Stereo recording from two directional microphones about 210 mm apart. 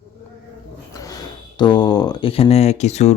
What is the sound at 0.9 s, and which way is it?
Speech, 15° left (ahead or behind).